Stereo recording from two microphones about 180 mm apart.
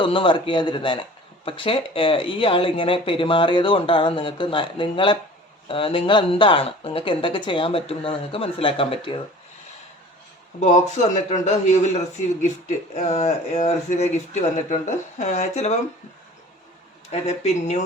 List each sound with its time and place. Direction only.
0.0 s speech: 30° left (ahead or behind)
10.6 s a man's voice: 40° left (ahead or behind)
17.1 s a man's voice: 35° left (ahead or behind)